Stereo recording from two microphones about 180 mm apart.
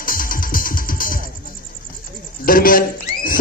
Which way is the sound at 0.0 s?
50° left (ahead or behind).